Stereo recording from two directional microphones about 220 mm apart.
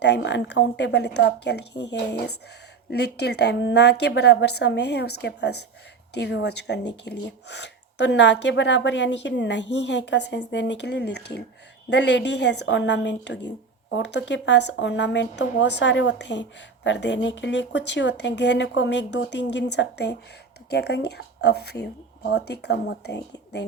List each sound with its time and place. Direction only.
0.0 s speech: 50° left (ahead or behind)